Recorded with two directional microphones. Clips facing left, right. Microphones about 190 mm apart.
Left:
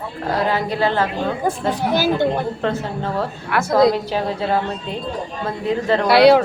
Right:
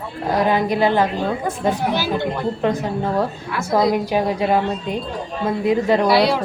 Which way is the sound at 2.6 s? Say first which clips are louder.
Right 2 dB; 15° right (ahead or behind).